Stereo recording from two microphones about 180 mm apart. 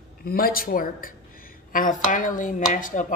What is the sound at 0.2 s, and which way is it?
A woman's voice, 55° left (ahead or behind).